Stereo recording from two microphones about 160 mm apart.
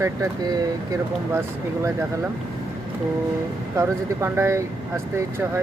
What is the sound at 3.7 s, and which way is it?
Speech, 15° right (ahead or behind).